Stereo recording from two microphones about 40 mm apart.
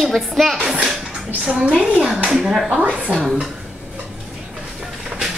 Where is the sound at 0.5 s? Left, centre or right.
Centre.